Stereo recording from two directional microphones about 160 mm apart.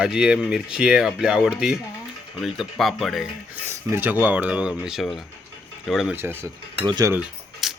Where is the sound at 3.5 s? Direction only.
15° right (ahead or behind).